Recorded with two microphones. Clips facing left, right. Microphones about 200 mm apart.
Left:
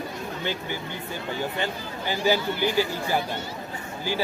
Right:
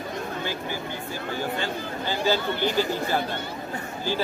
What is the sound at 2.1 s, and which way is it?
Speech, 15° left (ahead or behind).